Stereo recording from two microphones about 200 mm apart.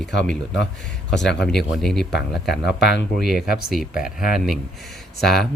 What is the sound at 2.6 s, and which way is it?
Speech, 55° left (ahead or behind).